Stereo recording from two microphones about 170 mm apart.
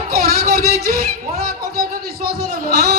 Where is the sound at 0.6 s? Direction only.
65° right (ahead or behind).